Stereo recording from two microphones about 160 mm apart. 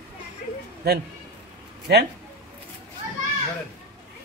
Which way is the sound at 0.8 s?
85° right.